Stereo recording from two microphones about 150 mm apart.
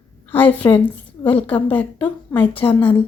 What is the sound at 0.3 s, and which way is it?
A woman's voice, 10° left (ahead or behind).